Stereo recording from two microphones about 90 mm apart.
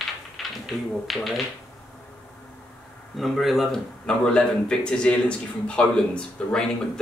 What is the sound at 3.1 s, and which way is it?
Speech, centre (ahead or behind).